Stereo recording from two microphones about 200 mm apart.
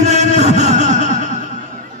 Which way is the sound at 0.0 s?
35° right (ahead or behind).